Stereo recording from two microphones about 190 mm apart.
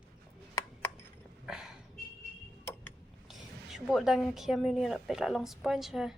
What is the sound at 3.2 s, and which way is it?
A woman's voice, centre (ahead or behind).